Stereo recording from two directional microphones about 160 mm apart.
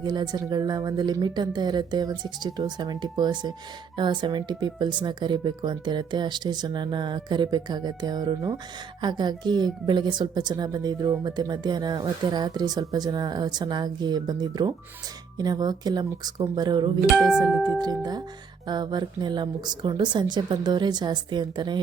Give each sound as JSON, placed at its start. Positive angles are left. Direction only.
{"t": 0.0, "sound": "speech", "side_deg": -25}